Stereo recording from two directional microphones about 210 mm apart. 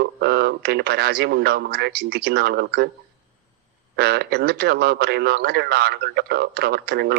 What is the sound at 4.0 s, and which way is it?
Speech, 50° right (ahead or behind).